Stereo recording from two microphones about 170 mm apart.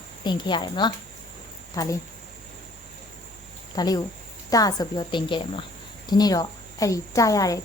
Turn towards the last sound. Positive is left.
turn(degrees=20)  # may be behind; listen again after turning